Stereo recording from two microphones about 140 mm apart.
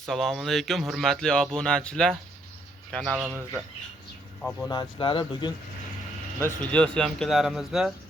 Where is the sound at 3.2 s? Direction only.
15° right (ahead or behind).